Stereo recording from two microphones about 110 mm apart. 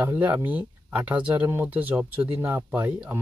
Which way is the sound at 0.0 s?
15° right (ahead or behind).